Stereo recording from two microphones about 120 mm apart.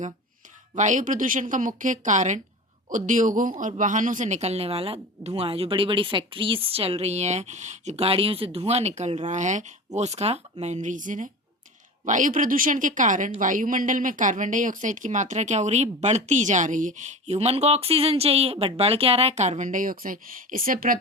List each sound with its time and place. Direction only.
0.8 s speech: 90° right
8.0 s speech: 50° right (ahead or behind); by 20.6 s 90° right